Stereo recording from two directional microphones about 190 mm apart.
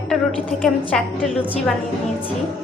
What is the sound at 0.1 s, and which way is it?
A woman's voice, centre (ahead or behind).